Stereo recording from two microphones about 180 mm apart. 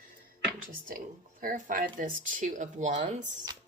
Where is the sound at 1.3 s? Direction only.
50° right (ahead or behind).